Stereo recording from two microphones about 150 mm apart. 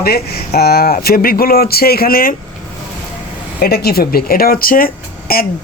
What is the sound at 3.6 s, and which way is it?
A woman's voice, 90° left.